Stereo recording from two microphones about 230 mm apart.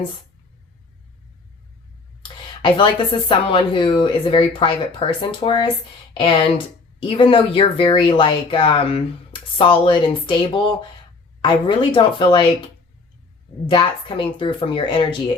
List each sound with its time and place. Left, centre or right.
2.2 s speech: left
13.7 s speech: centre